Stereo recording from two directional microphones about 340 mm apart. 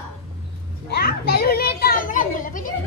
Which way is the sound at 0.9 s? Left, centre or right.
Left.